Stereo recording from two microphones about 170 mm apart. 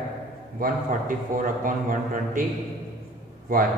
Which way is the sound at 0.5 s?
55° right (ahead or behind).